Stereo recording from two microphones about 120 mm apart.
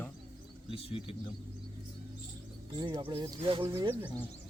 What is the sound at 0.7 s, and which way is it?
Speech, 50° left (ahead or behind).